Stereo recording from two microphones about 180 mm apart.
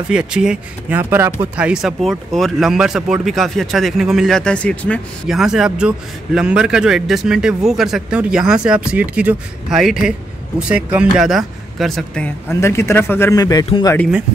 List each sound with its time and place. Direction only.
0.1 s speech: 5° right (ahead or behind)
12.4 s speech: 15° left (ahead or behind)